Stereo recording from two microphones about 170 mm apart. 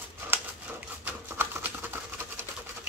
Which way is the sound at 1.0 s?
10° right (ahead or behind).